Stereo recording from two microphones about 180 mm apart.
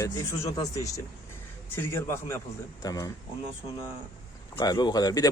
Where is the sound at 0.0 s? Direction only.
15° left (ahead or behind).